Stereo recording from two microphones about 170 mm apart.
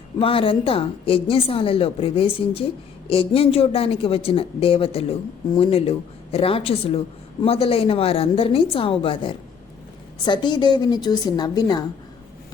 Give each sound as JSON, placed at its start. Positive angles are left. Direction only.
{"t": 0.2, "sound": "a woman's voice", "side_deg": 30}